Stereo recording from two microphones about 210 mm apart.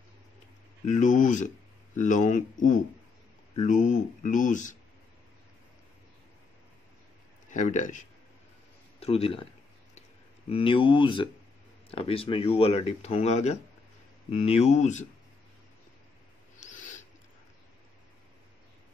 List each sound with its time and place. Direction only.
0.8 s speech: 35° left (ahead or behind)
3.5 s speech: 35° left (ahead or behind)
7.4 s speech: 35° left (ahead or behind)
10.5 s speech: 25° left (ahead or behind)
16.5 s owl: 35° left (ahead or behind)